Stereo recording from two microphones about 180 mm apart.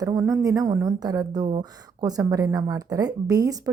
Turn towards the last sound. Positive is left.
turn(degrees=-20)  # may be behind; listen again after turning